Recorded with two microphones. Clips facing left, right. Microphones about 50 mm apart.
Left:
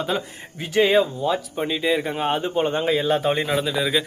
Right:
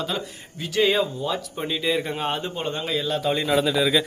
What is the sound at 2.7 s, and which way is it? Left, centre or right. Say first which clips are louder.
Speech: left 5 dB; left.